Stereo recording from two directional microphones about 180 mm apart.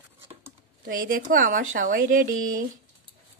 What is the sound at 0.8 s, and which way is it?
Speech, 55° right (ahead or behind).